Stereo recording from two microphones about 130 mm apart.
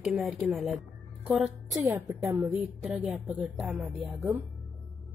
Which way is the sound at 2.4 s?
10° right (ahead or behind).